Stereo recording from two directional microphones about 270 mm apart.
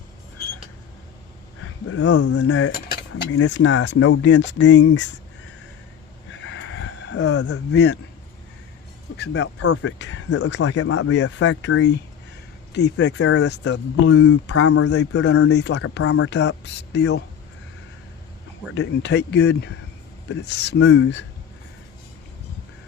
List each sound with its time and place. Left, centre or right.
1.6 s a sound: left
2.5 s cutlery: left
4.8 s speech: left
6.3 s a sound: left
7.7 s cutlery: left
9.1 s cutlery: left
9.6 s speech: left
12.7 s cutlery: left
18.7 s cutlery: left
20.9 s speech: left